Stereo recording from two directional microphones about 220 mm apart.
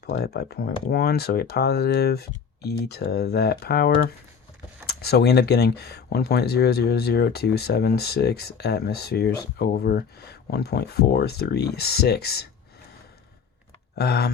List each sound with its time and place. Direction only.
0.0 s speech: 45° left (ahead or behind)
13.9 s speech: 45° left (ahead or behind)